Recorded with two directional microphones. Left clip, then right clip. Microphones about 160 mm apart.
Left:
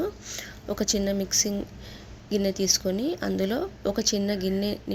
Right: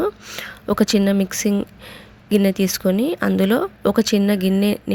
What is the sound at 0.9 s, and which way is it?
Speech, 25° right (ahead or behind).